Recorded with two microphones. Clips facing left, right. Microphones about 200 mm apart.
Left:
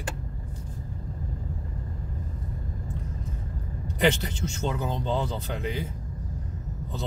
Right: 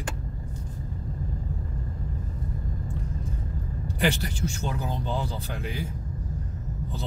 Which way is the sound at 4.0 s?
20° left (ahead or behind).